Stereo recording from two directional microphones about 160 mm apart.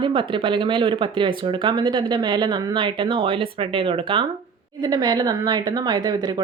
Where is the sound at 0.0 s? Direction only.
30° right (ahead or behind).